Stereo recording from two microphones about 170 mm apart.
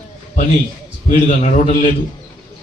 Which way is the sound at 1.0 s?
45° left (ahead or behind).